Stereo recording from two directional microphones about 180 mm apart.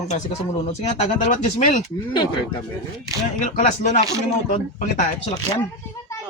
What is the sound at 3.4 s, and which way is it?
Speech, 40° left (ahead or behind).